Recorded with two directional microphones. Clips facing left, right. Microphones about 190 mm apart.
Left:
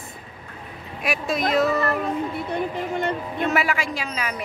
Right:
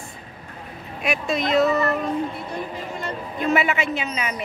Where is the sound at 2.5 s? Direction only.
60° left (ahead or behind).